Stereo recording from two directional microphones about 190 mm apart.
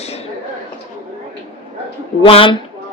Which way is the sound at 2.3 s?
30° left (ahead or behind).